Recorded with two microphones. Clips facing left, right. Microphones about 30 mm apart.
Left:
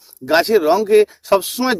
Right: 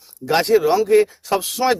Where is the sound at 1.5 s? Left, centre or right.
Centre.